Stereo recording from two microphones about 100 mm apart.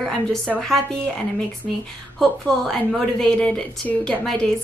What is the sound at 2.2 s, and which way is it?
A woman's voice, 5° left (ahead or behind).